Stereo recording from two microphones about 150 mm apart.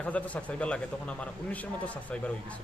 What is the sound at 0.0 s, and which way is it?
A man's voice, 10° left (ahead or behind).